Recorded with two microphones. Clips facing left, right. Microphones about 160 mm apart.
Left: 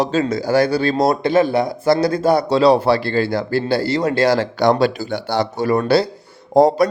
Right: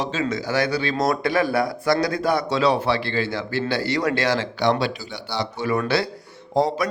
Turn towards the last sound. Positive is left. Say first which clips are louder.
# left 8 dB
turn(degrees=45)  # may be behind; listen again after turning